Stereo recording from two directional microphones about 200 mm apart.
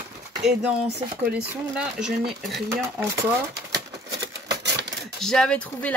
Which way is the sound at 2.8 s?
15° right (ahead or behind).